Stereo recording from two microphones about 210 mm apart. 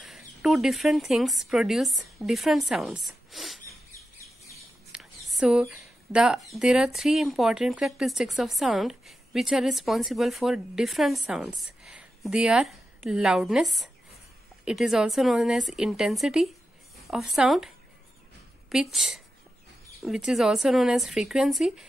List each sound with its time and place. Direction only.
0.0 s speech: centre (ahead or behind)
4.9 s a sound: 5° right (ahead or behind)
6.5 s a woman's voice: 5° right (ahead or behind)